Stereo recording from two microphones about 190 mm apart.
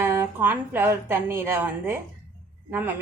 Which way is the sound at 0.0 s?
15° right (ahead or behind).